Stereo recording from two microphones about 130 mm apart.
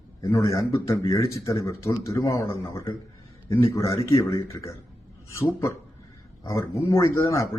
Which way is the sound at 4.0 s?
25° left (ahead or behind).